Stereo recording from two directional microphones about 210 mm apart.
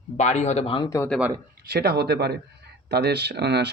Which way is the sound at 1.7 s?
50° right (ahead or behind).